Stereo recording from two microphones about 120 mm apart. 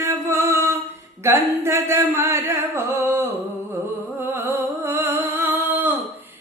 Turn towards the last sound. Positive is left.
turn(degrees=-15)  # may be behind; listen again after turning